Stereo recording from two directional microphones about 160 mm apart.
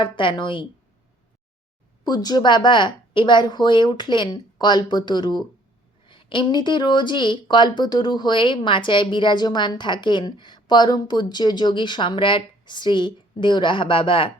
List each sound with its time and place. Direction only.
0.0 s speech: 30° left (ahead or behind)
2.0 s speech: 25° left (ahead or behind)